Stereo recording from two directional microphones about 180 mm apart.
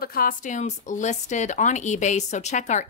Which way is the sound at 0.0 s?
55° left (ahead or behind).